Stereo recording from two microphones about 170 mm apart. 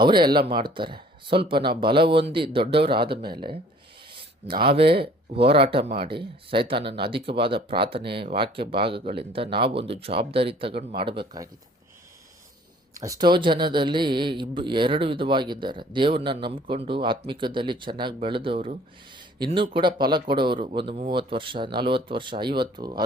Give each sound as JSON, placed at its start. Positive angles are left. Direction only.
{"t": 0.0, "sound": "speech", "side_deg": -25}
{"t": 4.1, "sound": "a sound", "side_deg": -30}
{"t": 4.6, "sound": "speech", "side_deg": -30}
{"t": 13.0, "sound": "speech", "side_deg": -20}